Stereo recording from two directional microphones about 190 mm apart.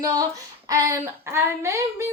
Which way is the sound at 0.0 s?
15° right (ahead or behind).